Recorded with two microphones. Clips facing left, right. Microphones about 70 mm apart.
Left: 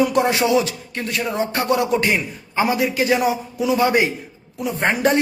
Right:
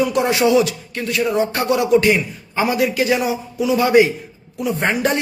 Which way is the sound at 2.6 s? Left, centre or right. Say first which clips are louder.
Right 1 dB; left.